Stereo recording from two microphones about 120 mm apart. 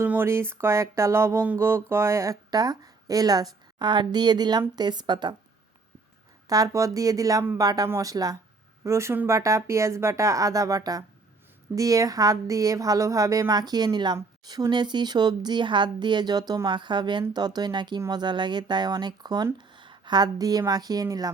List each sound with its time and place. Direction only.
0.0 s music: 20° right (ahead or behind)
3.8 s speech: 35° right (ahead or behind)
6.5 s music: 30° right (ahead or behind)
7.6 s speech: 30° right (ahead or behind)
8.8 s music: 25° right (ahead or behind)
14.4 s speech: 35° right (ahead or behind)